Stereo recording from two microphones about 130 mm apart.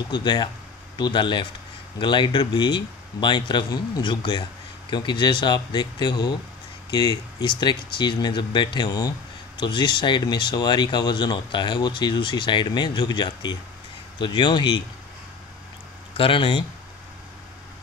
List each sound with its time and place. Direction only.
0.1 s speech: 35° left (ahead or behind)
16.2 s speech: 40° left (ahead or behind)